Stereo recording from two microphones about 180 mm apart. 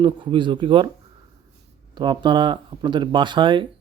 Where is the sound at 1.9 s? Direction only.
25° right (ahead or behind).